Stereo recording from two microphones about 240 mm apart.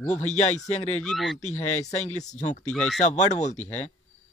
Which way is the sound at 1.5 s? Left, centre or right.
Left.